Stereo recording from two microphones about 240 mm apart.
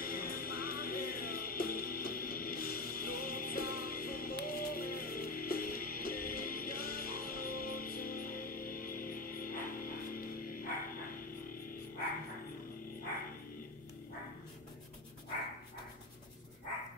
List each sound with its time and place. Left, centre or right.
0.0 s music: left